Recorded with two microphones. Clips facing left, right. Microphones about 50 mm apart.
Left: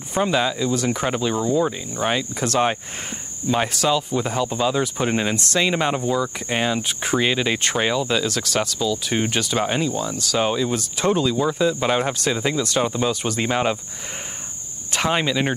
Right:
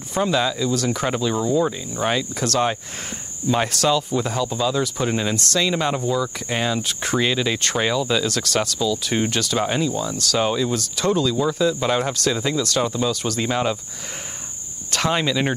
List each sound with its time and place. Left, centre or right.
0.1 s speech: centre
3.4 s speech: centre
14.9 s speech: centre